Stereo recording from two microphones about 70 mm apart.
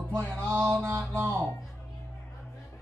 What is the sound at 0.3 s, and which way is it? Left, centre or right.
Music, right.